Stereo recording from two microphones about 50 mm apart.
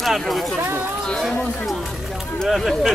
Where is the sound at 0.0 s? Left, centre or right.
Centre.